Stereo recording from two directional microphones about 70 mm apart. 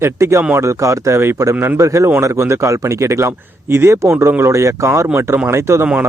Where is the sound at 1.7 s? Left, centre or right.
Right.